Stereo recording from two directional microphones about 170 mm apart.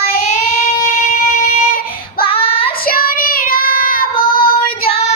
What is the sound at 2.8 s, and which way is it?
Child singing, 55° left (ahead or behind).